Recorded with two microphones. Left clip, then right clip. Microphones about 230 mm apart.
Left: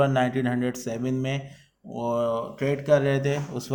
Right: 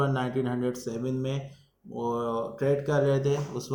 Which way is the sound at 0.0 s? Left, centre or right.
Left.